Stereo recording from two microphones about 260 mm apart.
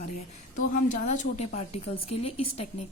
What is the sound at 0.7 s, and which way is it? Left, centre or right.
A woman's voice, left.